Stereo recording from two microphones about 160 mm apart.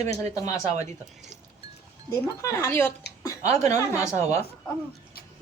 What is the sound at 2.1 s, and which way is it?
Speech, 20° left (ahead or behind).